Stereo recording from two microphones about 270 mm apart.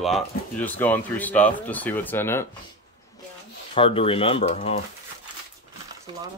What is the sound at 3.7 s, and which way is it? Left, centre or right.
Speech, left.